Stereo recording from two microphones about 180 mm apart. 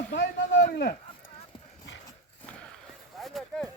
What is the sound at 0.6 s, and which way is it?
Speech, 55° left (ahead or behind).